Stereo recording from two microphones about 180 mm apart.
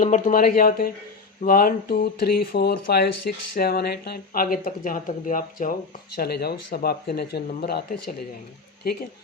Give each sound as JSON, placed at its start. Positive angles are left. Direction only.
{"t": 0.0, "sound": "speech", "side_deg": 45}
{"t": 6.1, "sound": "speech", "side_deg": 60}